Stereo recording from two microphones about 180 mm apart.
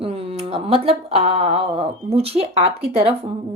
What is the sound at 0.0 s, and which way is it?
A woman's voice, 35° right (ahead or behind).